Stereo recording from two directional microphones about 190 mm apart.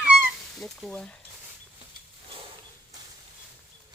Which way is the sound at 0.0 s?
5° right (ahead or behind).